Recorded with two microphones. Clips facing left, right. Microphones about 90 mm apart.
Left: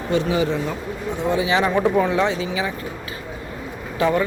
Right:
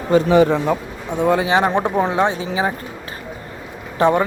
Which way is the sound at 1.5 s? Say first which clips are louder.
Right 2 dB; 35° right (ahead or behind).